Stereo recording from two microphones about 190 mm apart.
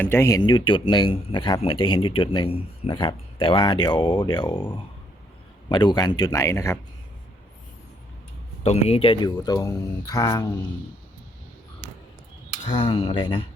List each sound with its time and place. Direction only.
0.0 s speech: 10° left (ahead or behind)
5.6 s speech: 25° left (ahead or behind)
8.6 s speech: 35° left (ahead or behind); by 10.4 s 20° left (ahead or behind)
12.6 s speech: 25° left (ahead or behind)